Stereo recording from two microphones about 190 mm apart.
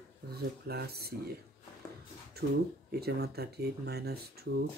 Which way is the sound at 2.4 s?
55° right (ahead or behind).